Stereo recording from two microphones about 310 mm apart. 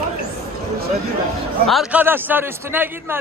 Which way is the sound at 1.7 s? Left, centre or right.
Centre.